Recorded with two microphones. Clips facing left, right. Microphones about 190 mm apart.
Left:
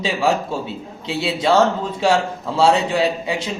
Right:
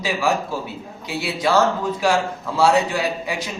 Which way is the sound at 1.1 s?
25° left (ahead or behind).